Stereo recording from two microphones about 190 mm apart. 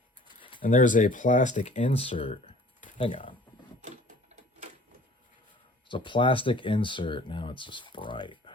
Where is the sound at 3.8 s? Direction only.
40° right (ahead or behind).